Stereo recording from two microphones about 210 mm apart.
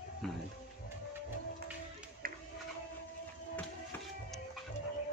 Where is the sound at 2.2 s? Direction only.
45° right (ahead or behind).